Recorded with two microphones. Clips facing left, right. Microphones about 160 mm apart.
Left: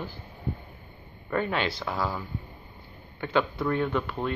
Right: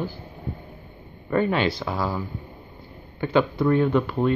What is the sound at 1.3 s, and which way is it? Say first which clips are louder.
Speech: right 6 dB; 10° right (ahead or behind).